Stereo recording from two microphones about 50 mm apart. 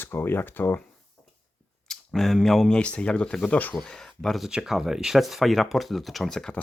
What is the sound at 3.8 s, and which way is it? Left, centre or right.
Speech, centre.